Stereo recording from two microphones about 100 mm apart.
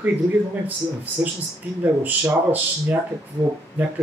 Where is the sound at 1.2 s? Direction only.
15° right (ahead or behind).